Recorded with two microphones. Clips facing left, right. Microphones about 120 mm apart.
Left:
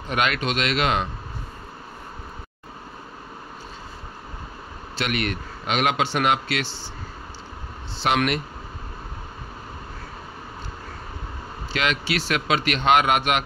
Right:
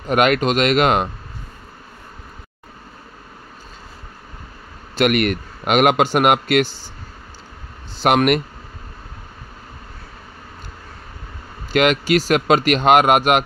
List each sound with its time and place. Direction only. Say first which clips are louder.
0.1 s speech: right 8 dB; 50° right (ahead or behind)
4.9 s speech: right 9 dB; 55° right (ahead or behind)
8.0 s speech: right 6 dB; 50° right (ahead or behind)
11.7 s speech: right 9 dB; 50° right (ahead or behind)